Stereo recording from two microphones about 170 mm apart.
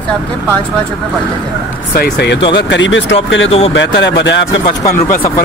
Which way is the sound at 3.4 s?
35° left (ahead or behind).